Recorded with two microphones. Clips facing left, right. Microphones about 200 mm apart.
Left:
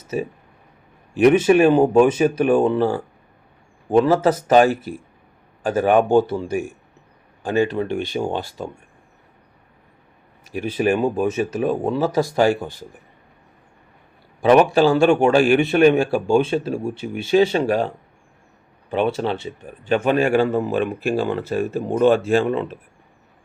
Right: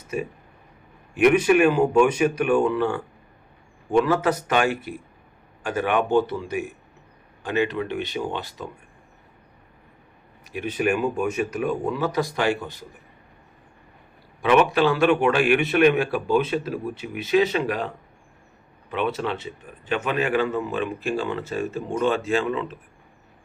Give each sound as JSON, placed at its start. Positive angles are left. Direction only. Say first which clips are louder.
{"t": 0.1, "sound": "a man's voice", "louder": "left 4 dB", "side_deg": 35}
{"t": 7.4, "sound": "a man's voice", "louder": "left 4 dB", "side_deg": 35}
{"t": 10.5, "sound": "a man's voice", "louder": "left 4 dB", "side_deg": 35}
{"t": 14.4, "sound": "a man's voice", "louder": "left 5 dB", "side_deg": 40}
{"t": 21.6, "sound": "a man's voice", "louder": "left 5 dB", "side_deg": 35}
{"t": 21.9, "sound": "speech", "louder": "left 7 dB", "side_deg": 55}